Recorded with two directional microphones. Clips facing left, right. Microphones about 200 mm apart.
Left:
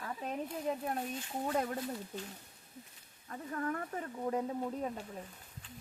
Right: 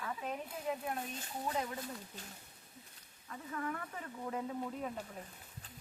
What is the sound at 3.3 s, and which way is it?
Speech, 40° left (ahead or behind).